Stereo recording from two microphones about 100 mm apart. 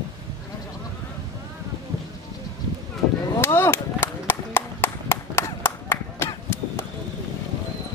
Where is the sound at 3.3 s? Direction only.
25° left (ahead or behind).